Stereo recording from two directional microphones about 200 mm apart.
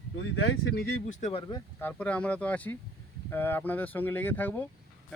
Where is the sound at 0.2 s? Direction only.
85° left.